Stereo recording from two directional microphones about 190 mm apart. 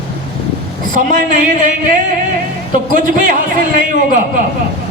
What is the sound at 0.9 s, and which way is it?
Speech, 45° right (ahead or behind).